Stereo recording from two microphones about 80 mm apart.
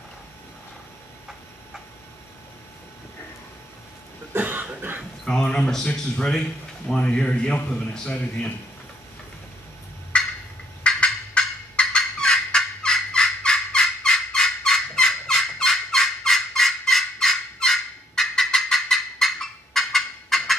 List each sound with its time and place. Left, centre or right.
4.3 s cough: right
5.2 s a man's voice: centre
10.1 s turkey: centre
10.8 s fowl: centre